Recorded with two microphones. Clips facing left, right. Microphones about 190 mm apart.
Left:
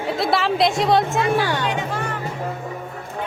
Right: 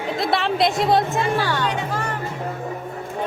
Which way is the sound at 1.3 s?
15° left (ahead or behind).